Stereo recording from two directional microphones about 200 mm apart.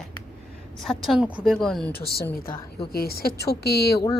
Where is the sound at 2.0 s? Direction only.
50° left (ahead or behind).